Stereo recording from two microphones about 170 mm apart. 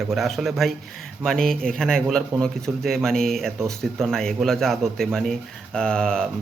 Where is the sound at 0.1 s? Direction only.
Centre (ahead or behind).